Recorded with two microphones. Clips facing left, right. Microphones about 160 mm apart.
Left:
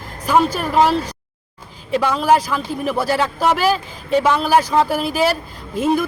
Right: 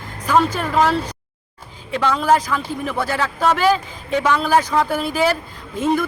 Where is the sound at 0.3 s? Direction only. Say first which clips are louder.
Left 1 dB; 10° left (ahead or behind).